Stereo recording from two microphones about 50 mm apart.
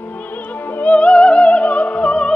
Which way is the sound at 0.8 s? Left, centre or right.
Left.